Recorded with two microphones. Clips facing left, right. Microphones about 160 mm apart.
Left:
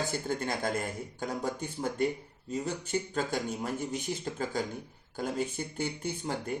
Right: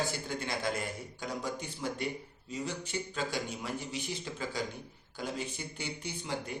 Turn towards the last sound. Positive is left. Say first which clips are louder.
# left 4 dB
turn(degrees=50)  # may be behind; listen again after turning